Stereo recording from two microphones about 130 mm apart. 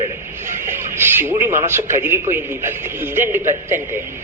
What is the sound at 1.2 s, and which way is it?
A man's voice, 20° right (ahead or behind).